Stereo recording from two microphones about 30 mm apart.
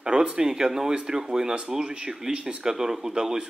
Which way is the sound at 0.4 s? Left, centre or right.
Centre.